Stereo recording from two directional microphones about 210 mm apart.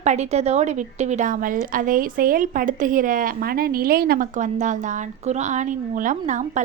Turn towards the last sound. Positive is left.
turn(degrees=-35)  # may be behind; listen again after turning